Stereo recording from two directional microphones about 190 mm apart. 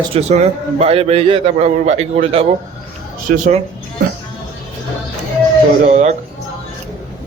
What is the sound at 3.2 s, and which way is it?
Speech, 40° right (ahead or behind).